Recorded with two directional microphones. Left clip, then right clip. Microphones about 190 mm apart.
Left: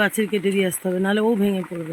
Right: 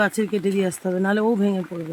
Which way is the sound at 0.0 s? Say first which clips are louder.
Left 1 dB; 10° right (ahead or behind).